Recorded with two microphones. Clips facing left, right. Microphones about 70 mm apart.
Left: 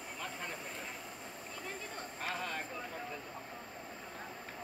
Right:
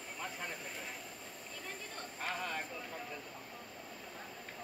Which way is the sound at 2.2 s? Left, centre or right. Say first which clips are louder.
Even; centre.